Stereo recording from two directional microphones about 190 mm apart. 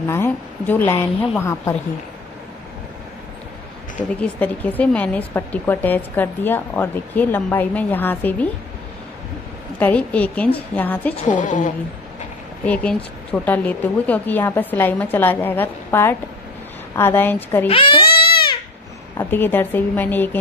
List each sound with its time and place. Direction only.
0.1 s speech: 10° left (ahead or behind)
4.2 s speech: 10° left (ahead or behind)
9.8 s speech: 10° left (ahead or behind)
11.2 s a woman's voice: 40° left (ahead or behind)
12.6 s speech: 5° left (ahead or behind)
17.6 s speech: 30° left (ahead or behind)
18.1 s crying: 55° left (ahead or behind)
19.1 s speech: 10° left (ahead or behind)